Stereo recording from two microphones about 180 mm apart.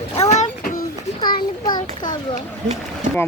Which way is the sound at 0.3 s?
40° left (ahead or behind).